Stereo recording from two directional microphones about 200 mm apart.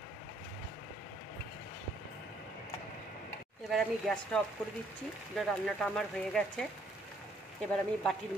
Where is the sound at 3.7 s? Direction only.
Centre (ahead or behind).